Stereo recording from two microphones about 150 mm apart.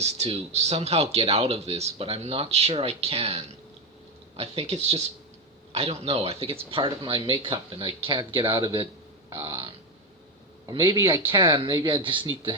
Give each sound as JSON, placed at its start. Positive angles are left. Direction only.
{"t": 0.0, "sound": "speech", "side_deg": -45}